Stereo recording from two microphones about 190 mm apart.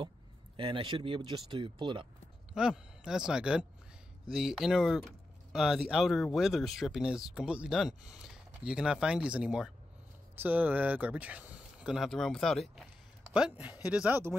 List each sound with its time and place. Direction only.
0.6 s speech: 25° right (ahead or behind)
2.5 s speech: 5° right (ahead or behind)